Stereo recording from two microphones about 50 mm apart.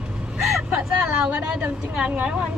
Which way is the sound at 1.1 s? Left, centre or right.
Right.